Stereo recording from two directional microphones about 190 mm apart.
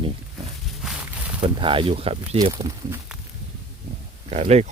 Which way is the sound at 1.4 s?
25° right (ahead or behind).